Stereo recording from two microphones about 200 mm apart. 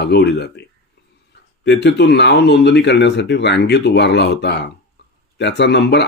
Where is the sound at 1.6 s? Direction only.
55° left (ahead or behind).